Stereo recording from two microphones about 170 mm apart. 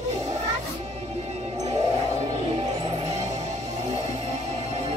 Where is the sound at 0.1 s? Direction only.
40° right (ahead or behind).